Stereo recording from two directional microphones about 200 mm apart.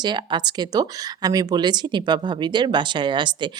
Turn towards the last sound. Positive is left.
turn(degrees=-25)  # may be behind; listen again after turning